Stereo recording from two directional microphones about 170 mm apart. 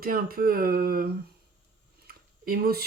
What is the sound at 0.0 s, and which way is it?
Speech, 60° right (ahead or behind).